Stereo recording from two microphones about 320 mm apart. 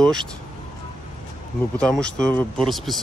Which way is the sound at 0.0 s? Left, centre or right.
Centre.